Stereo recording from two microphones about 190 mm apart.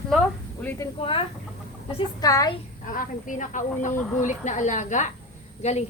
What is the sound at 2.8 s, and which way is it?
A woman's voice, 45° left (ahead or behind).